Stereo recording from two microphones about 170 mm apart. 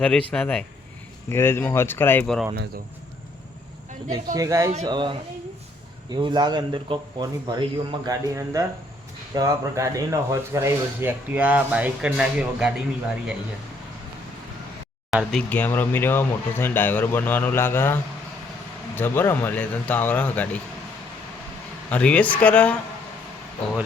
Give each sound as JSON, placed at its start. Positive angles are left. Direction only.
{"t": 0.0, "sound": "speech", "side_deg": 5}
{"t": 2.2, "sound": "speech", "side_deg": 0}
{"t": 4.4, "sound": "speech", "side_deg": -20}
{"t": 15.1, "sound": "speech", "side_deg": 0}
{"t": 21.8, "sound": "speech", "side_deg": 10}